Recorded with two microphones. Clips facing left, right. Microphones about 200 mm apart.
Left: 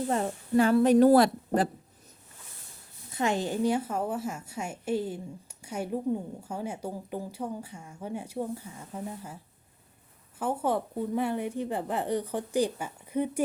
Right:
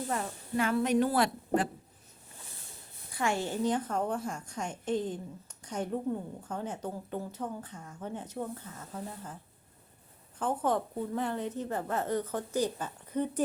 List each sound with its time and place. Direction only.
0.1 s a woman's voice: 30° left (ahead or behind)
3.1 s a woman's voice: 20° left (ahead or behind)